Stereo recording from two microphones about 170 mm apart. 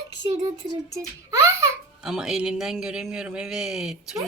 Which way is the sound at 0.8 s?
20° right (ahead or behind).